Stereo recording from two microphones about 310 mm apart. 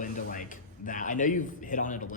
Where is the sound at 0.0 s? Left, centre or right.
Left.